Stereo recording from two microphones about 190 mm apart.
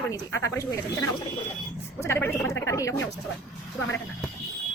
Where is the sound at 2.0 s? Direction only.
15° left (ahead or behind).